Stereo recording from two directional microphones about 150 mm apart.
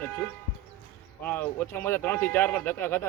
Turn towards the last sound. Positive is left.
turn(degrees=15)  # may be behind; listen again after turning